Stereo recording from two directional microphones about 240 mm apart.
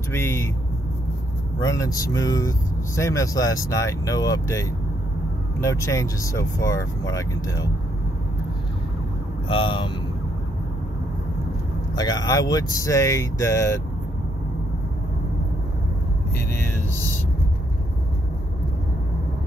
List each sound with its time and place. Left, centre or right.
0.1 s speech: centre
1.6 s speech: centre
9.5 s speech: left
11.9 s speech: centre